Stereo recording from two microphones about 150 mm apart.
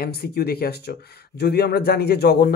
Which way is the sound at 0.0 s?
90° left.